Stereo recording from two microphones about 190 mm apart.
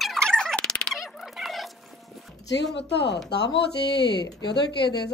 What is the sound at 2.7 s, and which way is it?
A woman's voice, 65° left (ahead or behind).